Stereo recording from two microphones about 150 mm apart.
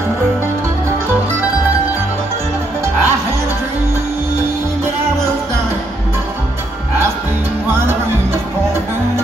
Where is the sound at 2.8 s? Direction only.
15° right (ahead or behind).